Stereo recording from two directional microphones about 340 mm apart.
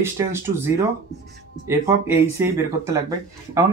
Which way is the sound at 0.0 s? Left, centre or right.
Centre.